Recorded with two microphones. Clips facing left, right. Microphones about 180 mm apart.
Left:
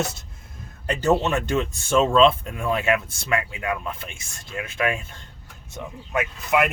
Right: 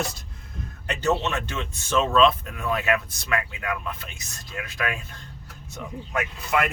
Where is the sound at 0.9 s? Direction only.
30° left (ahead or behind).